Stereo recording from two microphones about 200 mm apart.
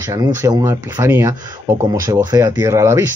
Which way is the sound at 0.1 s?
15° right (ahead or behind).